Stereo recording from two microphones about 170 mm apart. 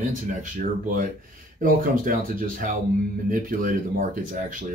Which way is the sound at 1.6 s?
55° right (ahead or behind).